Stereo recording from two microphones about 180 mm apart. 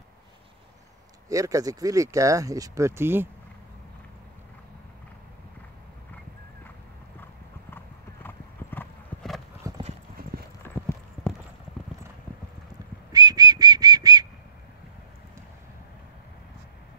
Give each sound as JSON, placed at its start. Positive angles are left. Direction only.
{"t": 1.3, "sound": "speech", "side_deg": -20}
{"t": 7.7, "sound": "clip-clop", "side_deg": 10}
{"t": 9.6, "sound": "clip-clop", "side_deg": -20}
{"t": 13.1, "sound": "whistling", "side_deg": -20}